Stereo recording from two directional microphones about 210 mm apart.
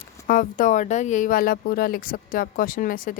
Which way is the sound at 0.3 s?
40° left (ahead or behind).